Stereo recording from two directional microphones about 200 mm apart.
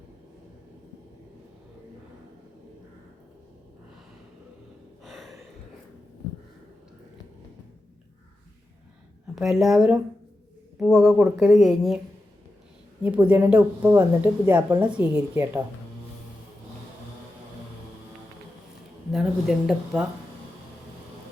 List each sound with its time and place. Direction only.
5.0 s a sound: centre (ahead or behind)
9.3 s speech: centre (ahead or behind)
13.0 s speech: 5° right (ahead or behind)
19.1 s speech: centre (ahead or behind)